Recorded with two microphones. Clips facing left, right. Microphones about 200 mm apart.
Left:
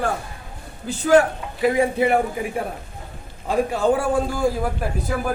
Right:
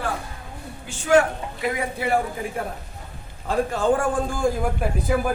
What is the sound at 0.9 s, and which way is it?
Speech, 35° left (ahead or behind).